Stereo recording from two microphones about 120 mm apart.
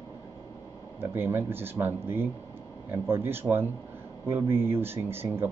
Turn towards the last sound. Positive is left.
turn(degrees=-20)  # may be behind; listen again after turning